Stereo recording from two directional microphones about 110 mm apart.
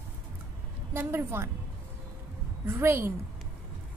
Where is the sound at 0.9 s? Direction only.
20° right (ahead or behind).